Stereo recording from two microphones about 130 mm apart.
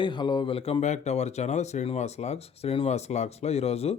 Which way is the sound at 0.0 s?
35° left (ahead or behind).